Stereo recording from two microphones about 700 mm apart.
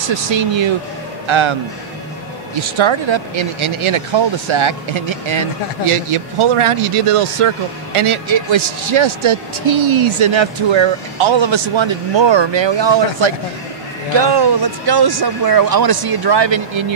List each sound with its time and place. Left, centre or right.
0.1 s a man's voice: right
2.8 s speech: right